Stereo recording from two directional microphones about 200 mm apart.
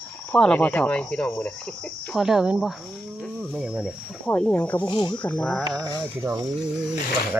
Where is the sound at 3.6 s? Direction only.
5° right (ahead or behind).